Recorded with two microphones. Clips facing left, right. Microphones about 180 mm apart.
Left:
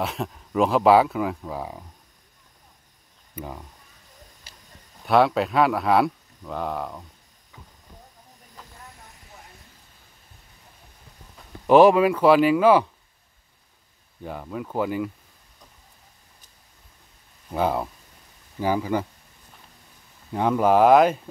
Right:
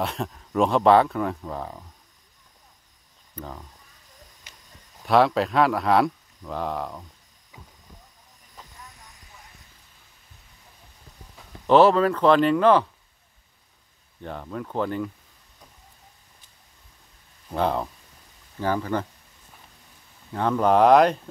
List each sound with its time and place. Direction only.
0.0 s speech: centre (ahead or behind)
3.3 s speech: 10° left (ahead or behind)
4.5 s a sound: 30° left (ahead or behind)
5.0 s speech: centre (ahead or behind)
11.6 s speech: 10° left (ahead or behind)
14.2 s speech: 5° left (ahead or behind)
17.5 s speech: 5° left (ahead or behind)
20.3 s speech: 10° left (ahead or behind)